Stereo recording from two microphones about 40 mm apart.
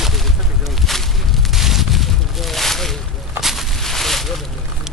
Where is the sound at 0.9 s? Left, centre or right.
Centre.